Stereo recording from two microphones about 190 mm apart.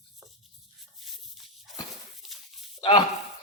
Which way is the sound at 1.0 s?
Centre (ahead or behind).